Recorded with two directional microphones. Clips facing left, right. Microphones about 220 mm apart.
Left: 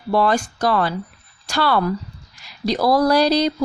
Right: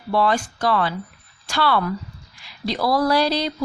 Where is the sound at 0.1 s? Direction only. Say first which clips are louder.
Left 2 dB; 45° left (ahead or behind).